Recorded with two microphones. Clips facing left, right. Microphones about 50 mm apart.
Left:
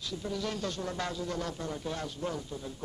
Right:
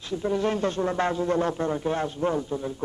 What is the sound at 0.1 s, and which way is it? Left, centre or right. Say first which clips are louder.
A man's voice: right 11 dB; right.